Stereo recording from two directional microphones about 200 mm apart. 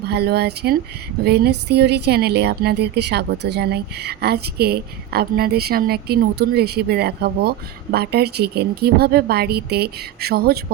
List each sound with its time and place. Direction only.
0.1 s speech: 55° right (ahead or behind)